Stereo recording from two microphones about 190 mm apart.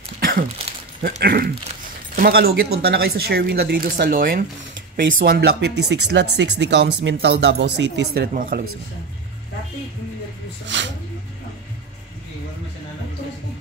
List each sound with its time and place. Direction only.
0.2 s a sound: 50° right (ahead or behind)
1.2 s speech: 55° right (ahead or behind)
10.7 s speech: 70° right (ahead or behind)